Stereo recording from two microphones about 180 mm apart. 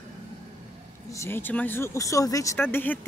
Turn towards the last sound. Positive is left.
turn(degrees=10)  # may be behind; listen again after turning